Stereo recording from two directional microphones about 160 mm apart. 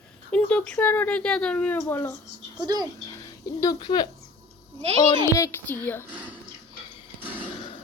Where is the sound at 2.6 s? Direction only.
25° right (ahead or behind).